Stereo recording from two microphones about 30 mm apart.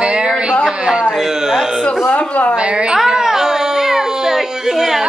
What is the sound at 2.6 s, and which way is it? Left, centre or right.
Speech, right.